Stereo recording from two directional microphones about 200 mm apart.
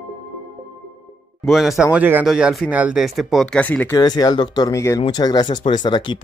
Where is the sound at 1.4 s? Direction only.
Centre (ahead or behind).